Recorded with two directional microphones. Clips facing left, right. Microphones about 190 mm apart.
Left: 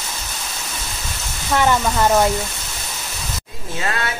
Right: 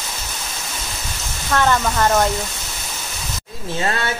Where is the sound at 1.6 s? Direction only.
10° left (ahead or behind).